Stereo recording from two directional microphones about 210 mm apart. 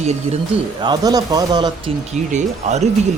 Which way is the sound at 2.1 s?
35° right (ahead or behind).